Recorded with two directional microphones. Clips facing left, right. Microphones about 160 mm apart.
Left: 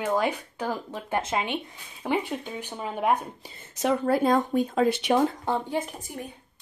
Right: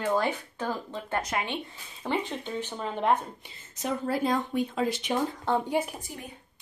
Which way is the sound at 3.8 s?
75° left (ahead or behind).